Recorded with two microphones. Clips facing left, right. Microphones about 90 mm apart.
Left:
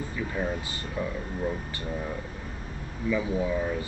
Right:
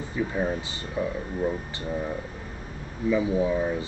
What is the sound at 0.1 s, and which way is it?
Speech, 20° right (ahead or behind).